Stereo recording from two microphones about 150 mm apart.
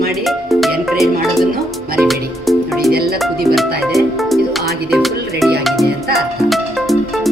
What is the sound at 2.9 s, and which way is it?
Speech, 90° right.